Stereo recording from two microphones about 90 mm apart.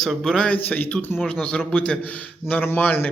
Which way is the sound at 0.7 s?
20° left (ahead or behind).